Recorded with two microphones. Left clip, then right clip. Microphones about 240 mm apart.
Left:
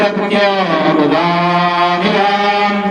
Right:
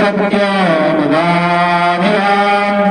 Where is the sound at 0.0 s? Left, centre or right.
Right.